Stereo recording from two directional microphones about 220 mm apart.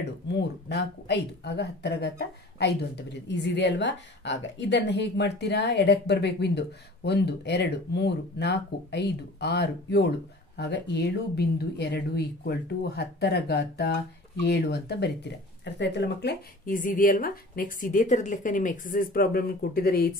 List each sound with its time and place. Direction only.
0.3 s speech: 50° left (ahead or behind)